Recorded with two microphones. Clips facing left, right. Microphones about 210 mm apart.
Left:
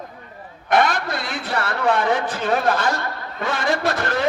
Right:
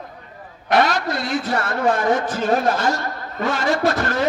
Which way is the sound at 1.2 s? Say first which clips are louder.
Right 4 dB; 45° right (ahead or behind).